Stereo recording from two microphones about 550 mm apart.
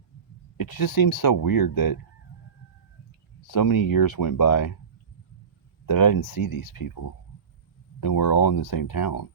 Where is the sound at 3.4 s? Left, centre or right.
Left.